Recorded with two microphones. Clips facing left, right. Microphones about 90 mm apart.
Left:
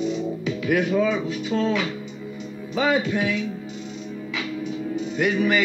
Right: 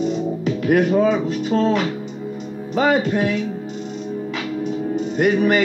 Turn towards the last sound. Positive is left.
turn(degrees=-40)  # may be behind; listen again after turning